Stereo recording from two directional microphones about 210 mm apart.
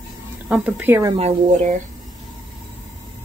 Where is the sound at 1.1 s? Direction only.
30° right (ahead or behind).